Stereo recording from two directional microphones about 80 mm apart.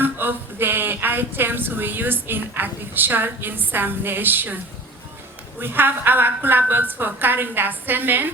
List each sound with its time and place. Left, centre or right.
0.0 s speech: right
5.5 s speech: right